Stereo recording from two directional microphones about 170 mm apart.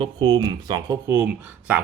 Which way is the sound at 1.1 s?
10° right (ahead or behind).